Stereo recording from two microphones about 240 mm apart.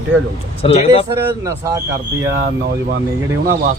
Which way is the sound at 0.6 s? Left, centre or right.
Left.